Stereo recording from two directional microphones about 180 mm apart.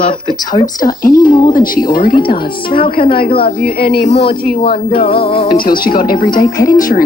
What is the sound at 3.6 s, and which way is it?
A woman's voice, 60° left (ahead or behind).